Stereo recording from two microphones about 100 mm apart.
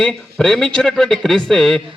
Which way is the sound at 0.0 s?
5° left (ahead or behind).